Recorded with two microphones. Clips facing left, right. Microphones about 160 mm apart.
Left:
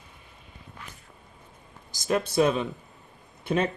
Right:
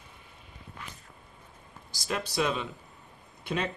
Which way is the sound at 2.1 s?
50° left (ahead or behind).